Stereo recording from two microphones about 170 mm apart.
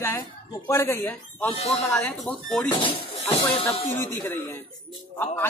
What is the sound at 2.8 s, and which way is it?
Speech, 30° left (ahead or behind).